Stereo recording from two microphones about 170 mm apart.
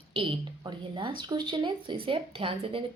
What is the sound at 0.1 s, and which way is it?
A woman's voice, 30° right (ahead or behind).